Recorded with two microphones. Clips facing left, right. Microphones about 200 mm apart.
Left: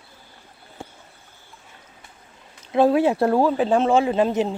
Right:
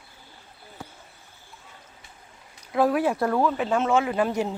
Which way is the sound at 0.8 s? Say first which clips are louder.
Left 3 dB; 25° left (ahead or behind).